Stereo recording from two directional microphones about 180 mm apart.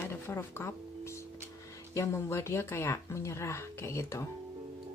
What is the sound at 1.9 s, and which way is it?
Speech, 15° left (ahead or behind).